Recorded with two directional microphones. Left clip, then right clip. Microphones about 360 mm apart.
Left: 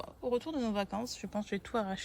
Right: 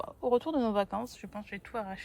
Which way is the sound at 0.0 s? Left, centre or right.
Centre.